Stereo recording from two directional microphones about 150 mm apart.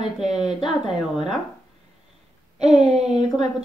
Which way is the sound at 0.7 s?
Centre (ahead or behind).